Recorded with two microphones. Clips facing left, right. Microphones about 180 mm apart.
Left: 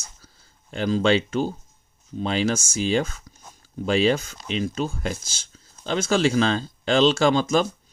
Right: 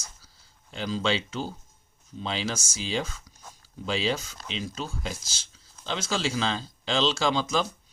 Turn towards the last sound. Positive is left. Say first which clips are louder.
# left 6 dB
turn(degrees=50)  # may be behind; listen again after turning